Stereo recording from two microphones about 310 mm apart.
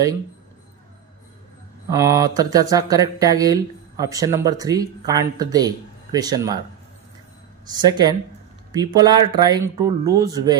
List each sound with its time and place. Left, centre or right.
1.9 s speech: centre
7.6 s speech: centre